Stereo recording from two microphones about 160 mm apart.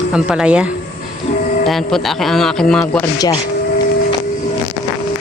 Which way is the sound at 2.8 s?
15° left (ahead or behind).